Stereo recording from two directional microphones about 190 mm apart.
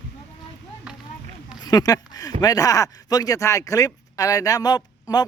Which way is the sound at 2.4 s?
20° left (ahead or behind).